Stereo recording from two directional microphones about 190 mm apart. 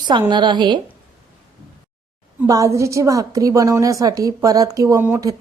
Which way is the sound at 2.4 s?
15° right (ahead or behind).